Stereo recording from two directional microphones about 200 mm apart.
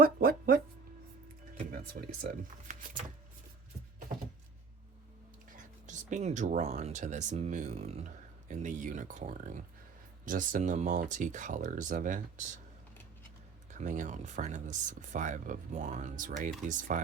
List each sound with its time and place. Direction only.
0.0 s a sound: 50° right (ahead or behind)
1.7 s speech: 45° right (ahead or behind)
5.5 s speech: 40° right (ahead or behind)
13.7 s speech: 35° right (ahead or behind)